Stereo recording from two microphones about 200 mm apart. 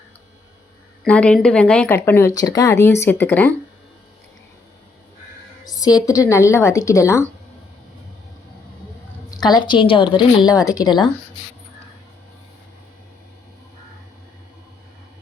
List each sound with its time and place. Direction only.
1.0 s speech: 5° left (ahead or behind)
5.6 s speech: 20° left (ahead or behind)
9.3 s a woman's voice: 20° left (ahead or behind)